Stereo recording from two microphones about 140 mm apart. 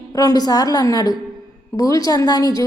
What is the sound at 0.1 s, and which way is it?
A woman's voice, 25° left (ahead or behind).